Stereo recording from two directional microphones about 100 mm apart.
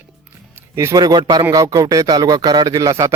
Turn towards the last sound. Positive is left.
turn(degrees=-35)  # may be behind; listen again after turning